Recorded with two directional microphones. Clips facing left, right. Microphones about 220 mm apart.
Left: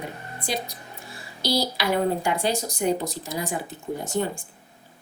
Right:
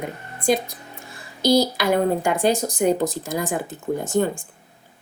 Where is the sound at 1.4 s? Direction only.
50° right (ahead or behind).